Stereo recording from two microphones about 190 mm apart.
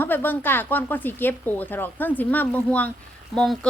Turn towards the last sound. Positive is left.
turn(degrees=5)  # may be behind; listen again after turning